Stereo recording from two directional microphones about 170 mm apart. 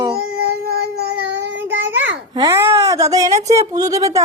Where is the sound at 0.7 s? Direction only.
75° right (ahead or behind).